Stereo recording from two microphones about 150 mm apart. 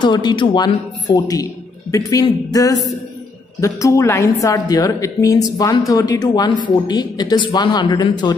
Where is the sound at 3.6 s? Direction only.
20° left (ahead or behind).